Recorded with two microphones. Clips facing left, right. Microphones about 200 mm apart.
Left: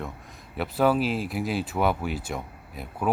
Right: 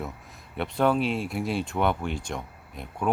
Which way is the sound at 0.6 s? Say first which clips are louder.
Left 1 dB; 5° left (ahead or behind).